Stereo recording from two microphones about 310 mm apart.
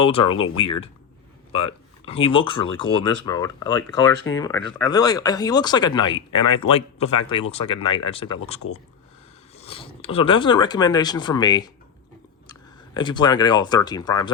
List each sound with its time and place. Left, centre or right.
0.0 s speech: centre
8.6 s speech: left
9.6 s speech: centre
12.9 s speech: centre